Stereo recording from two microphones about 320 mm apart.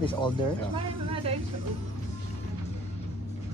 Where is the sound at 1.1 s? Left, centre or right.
Centre.